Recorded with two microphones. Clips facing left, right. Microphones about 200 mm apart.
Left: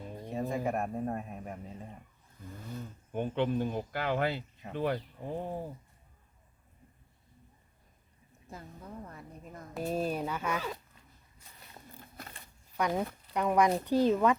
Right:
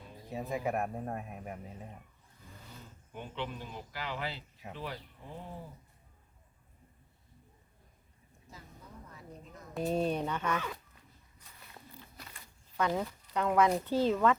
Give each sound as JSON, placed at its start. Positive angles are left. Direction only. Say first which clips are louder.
{"t": 0.3, "sound": "speech", "louder": "left 2 dB", "side_deg": 0}
{"t": 3.1, "sound": "speech", "louder": "left 10 dB", "side_deg": 55}
{"t": 9.0, "sound": "a sound", "louder": "left 3 dB", "side_deg": 55}
{"t": 9.7, "sound": "speech", "louder": "right 1 dB", "side_deg": 5}
{"t": 11.9, "sound": "a sound", "louder": "left 6 dB", "side_deg": 50}
{"t": 12.7, "sound": "speech", "louder": "left 1 dB", "side_deg": 15}